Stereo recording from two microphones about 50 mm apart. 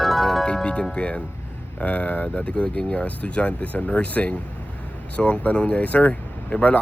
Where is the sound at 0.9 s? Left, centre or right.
Left.